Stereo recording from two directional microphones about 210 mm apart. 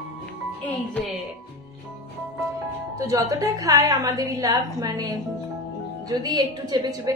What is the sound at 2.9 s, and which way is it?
A woman's voice, 15° right (ahead or behind).